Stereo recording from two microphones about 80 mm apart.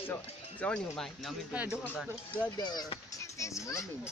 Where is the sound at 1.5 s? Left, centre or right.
Centre.